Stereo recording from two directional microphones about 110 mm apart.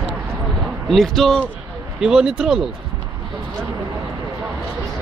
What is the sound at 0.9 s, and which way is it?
Speech, centre (ahead or behind).